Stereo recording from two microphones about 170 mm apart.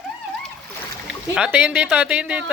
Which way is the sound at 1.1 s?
5° right (ahead or behind).